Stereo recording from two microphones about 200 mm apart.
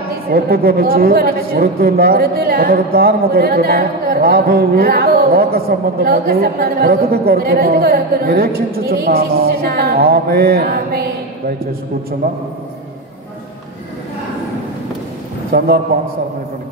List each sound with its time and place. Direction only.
0.3 s a woman's voice: 50° right (ahead or behind)
15.5 s a woman's voice: 50° right (ahead or behind)